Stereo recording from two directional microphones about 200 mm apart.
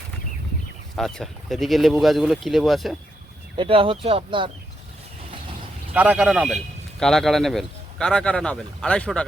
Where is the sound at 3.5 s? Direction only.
25° right (ahead or behind).